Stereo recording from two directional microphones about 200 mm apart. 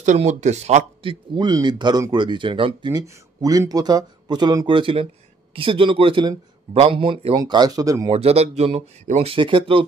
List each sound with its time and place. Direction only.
0.0 s speech: 35° right (ahead or behind); by 8.1 s 15° right (ahead or behind)
8.1 s speech: 30° right (ahead or behind)